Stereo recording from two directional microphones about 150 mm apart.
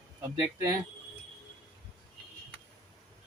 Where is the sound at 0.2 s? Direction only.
20° right (ahead or behind).